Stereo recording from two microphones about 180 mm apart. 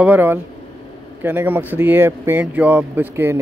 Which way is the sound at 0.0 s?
10° right (ahead or behind).